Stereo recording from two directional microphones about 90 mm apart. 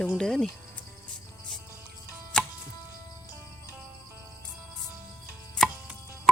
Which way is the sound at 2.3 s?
5° left (ahead or behind).